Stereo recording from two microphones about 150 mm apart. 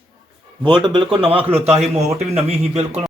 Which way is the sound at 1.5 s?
45° right (ahead or behind).